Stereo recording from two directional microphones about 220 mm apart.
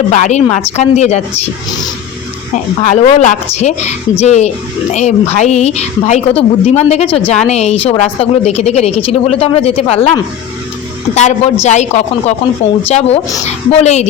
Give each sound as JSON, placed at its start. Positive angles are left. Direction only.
{"t": 0.1, "sound": "speech", "side_deg": 30}
{"t": 2.8, "sound": "speech", "side_deg": 30}